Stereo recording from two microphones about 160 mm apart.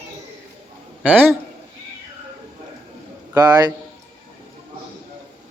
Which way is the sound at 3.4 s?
25° right (ahead or behind).